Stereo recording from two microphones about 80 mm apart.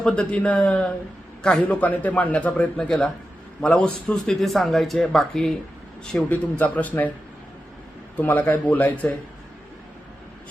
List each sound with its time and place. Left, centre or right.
0.0 s a man's voice: centre
6.2 s a man's voice: left
8.1 s a man's voice: left